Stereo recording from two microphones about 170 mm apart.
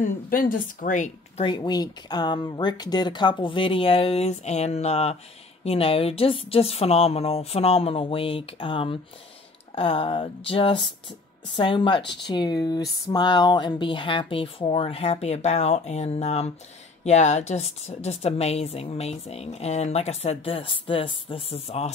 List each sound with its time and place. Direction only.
0.0 s a woman's voice: 55° left (ahead or behind)
1.4 s a woman's voice: 25° left (ahead or behind)